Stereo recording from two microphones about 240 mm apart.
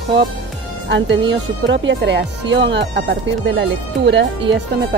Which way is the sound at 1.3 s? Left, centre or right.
Right.